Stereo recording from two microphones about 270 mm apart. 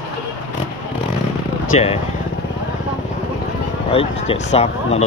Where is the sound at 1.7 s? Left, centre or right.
Left.